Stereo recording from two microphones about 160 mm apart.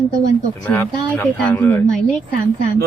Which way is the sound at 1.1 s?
15° left (ahead or behind).